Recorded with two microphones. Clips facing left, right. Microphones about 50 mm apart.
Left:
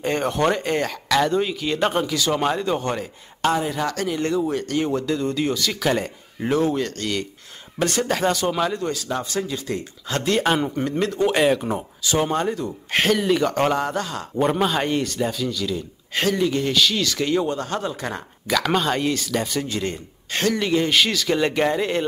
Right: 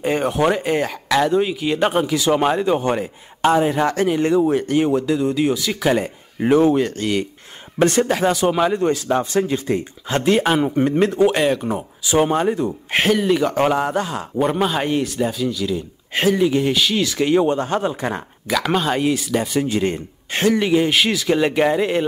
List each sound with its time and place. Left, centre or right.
0.0 s a man's voice: centre
7.8 s speech: right
8.1 s a man's voice: centre
10.4 s speech: centre
10.7 s speech: right
11.2 s speech: centre
12.0 s a man's voice: centre
13.0 s a man's voice: centre
14.3 s a man's voice: centre
18.5 s a man's voice: centre